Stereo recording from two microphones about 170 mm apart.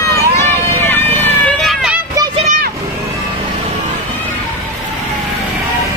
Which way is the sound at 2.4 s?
50° right (ahead or behind).